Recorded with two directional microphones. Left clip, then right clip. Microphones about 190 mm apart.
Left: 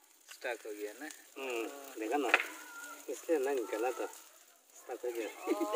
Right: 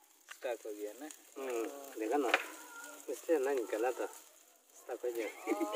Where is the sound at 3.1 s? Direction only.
10° left (ahead or behind).